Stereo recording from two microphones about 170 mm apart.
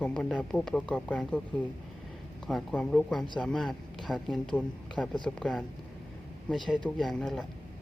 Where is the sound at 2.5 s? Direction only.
Centre (ahead or behind).